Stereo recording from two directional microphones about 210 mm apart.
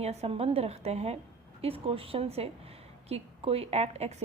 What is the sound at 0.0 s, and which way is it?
Speech, 30° right (ahead or behind).